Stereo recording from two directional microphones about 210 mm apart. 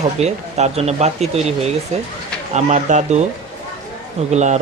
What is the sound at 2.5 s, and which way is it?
Speech, 35° right (ahead or behind).